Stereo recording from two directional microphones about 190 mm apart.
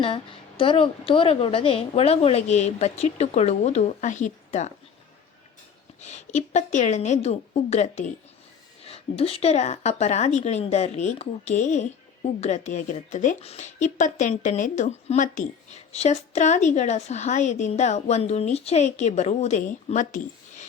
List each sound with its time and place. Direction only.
0.0 s a woman's voice: 30° left (ahead or behind)
6.0 s a woman's voice: 35° left (ahead or behind)